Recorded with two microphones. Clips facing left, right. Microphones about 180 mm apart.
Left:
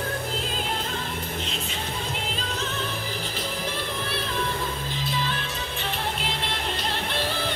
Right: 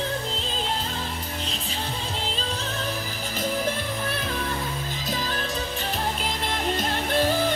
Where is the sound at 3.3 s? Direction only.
50° right (ahead or behind).